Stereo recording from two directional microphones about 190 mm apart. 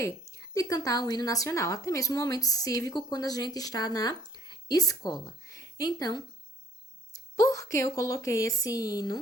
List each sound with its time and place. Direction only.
0.0 s a woman's voice: 15° left (ahead or behind)